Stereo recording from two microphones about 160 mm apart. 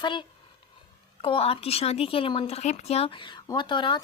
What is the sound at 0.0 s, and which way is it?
Speech, 30° left (ahead or behind).